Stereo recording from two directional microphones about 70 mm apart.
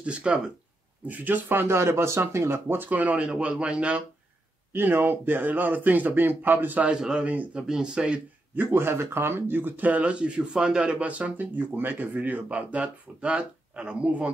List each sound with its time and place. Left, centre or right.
0.0 s speech: centre
1.0 s speech: right
4.7 s speech: right
7.0 s speech: centre
7.2 s speech: right
8.5 s speech: right; by 14.3 s centre